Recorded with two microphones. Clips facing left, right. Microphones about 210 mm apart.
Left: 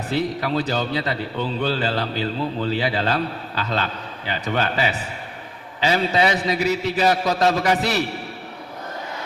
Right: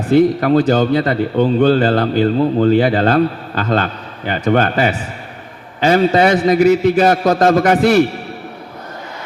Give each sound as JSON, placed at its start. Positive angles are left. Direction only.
{"t": 0.1, "sound": "a man's voice", "side_deg": -50}